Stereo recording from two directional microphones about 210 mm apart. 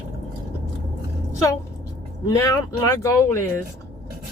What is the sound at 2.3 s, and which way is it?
Speech, 20° left (ahead or behind).